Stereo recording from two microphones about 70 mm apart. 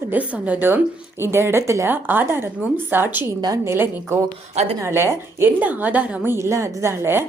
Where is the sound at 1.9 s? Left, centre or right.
Right.